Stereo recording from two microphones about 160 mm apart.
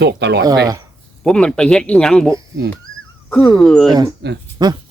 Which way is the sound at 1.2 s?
5° left (ahead or behind).